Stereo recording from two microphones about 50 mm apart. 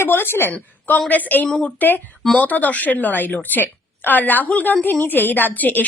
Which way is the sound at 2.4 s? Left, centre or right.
Left.